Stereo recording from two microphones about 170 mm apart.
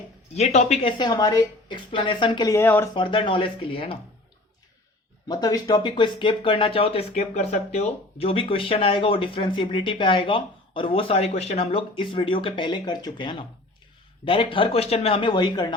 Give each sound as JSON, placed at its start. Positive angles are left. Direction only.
{"t": 0.3, "sound": "a woman's voice", "side_deg": 40}
{"t": 2.9, "sound": "speech", "side_deg": 30}
{"t": 5.3, "sound": "a woman's voice", "side_deg": 25}